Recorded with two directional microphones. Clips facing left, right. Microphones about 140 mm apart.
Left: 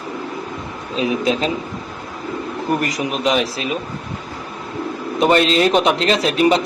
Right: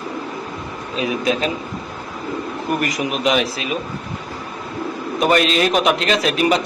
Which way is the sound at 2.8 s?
35° left (ahead or behind).